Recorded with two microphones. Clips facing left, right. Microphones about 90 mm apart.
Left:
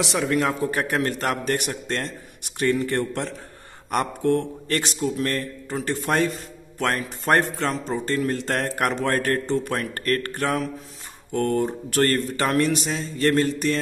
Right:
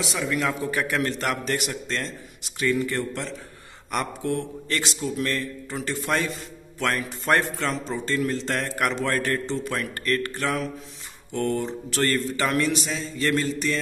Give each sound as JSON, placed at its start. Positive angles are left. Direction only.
{"t": 0.0, "sound": "a man's voice", "side_deg": 55}
{"t": 0.4, "sound": "a man's voice", "side_deg": 35}
{"t": 8.3, "sound": "speech", "side_deg": 50}